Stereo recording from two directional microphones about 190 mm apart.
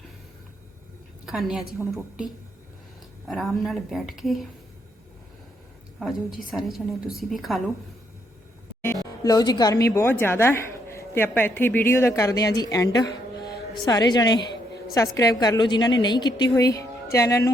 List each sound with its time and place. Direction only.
1.2 s a woman's voice: 5° right (ahead or behind)
3.2 s a woman's voice: centre (ahead or behind)
6.0 s a woman's voice: centre (ahead or behind)
9.2 s a woman's voice: 20° left (ahead or behind)